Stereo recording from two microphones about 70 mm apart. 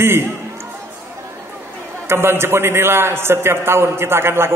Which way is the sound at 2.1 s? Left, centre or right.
Right.